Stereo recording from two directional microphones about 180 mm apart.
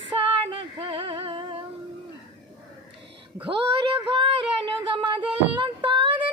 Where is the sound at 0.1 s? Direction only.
30° right (ahead or behind).